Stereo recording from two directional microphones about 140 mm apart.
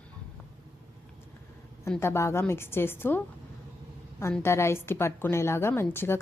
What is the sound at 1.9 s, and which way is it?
A woman's voice, 20° left (ahead or behind).